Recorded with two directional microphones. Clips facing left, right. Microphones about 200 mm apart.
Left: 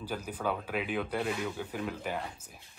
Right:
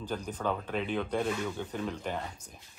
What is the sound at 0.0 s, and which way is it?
Speech, 10° left (ahead or behind).